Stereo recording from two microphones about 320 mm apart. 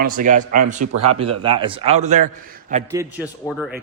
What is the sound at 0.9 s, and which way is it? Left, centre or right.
Speech, right.